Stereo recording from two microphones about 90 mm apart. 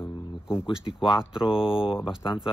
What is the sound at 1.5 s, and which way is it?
Speech, 80° left.